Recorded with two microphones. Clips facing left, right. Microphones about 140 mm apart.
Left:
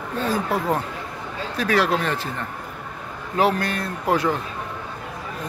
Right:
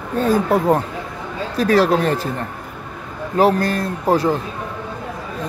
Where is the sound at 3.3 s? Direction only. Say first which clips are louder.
Right 5 dB; 40° right (ahead or behind).